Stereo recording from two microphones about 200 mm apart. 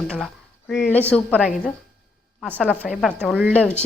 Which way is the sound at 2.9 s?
Centre (ahead or behind).